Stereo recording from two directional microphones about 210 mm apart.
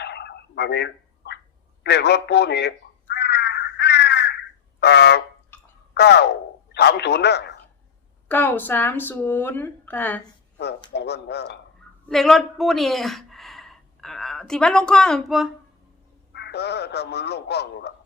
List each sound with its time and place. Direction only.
0.0 s a sound: 55° left (ahead or behind)
6.7 s speech: 50° left (ahead or behind)
8.3 s speech: 10° left (ahead or behind)
10.9 s a man's voice: 50° left (ahead or behind)
12.0 s a woman's voice: centre (ahead or behind)
16.3 s a man's voice: 50° left (ahead or behind)